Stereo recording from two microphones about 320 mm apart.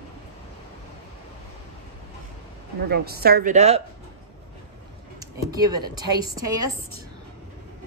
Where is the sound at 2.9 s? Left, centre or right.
Right.